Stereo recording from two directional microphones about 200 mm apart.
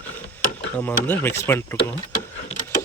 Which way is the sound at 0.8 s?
10° left (ahead or behind).